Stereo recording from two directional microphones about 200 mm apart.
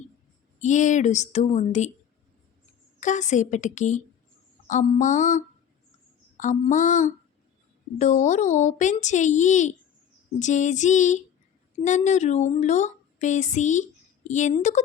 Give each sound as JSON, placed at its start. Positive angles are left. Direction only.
{"t": 0.6, "sound": "speech", "side_deg": 40}
{"t": 3.0, "sound": "speech", "side_deg": 35}